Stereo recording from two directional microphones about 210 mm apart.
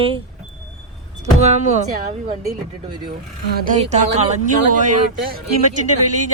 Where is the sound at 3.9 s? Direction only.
35° right (ahead or behind).